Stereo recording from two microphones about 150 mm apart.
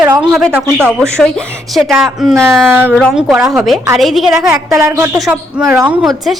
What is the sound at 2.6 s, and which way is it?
Speech, 15° right (ahead or behind).